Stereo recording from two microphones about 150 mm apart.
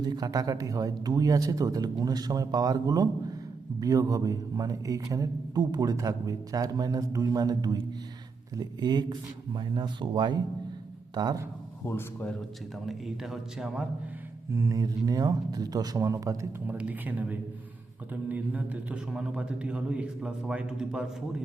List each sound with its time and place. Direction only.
0.0 s a man's voice: 25° right (ahead or behind)
11.9 s a man's voice: 10° left (ahead or behind)
12.8 s speech: centre (ahead or behind)
14.5 s a man's voice: 20° right (ahead or behind); by 21.4 s 5° right (ahead or behind)